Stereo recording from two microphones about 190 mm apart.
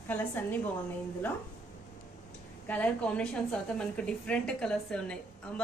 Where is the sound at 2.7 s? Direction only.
5° left (ahead or behind).